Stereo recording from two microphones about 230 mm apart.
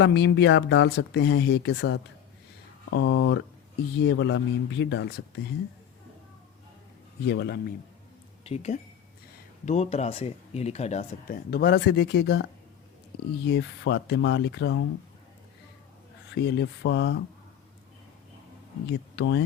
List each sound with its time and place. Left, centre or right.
0.0 s speech: left
7.3 s speech: left
8.4 s speech: left
11.5 s speech: left
13.5 s speech: left
16.3 s speech: left
18.9 s speech: left